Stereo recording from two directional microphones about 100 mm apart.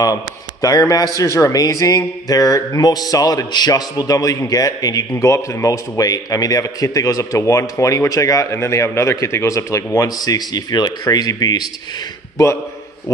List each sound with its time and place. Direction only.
0.0 s speech: 35° left (ahead or behind)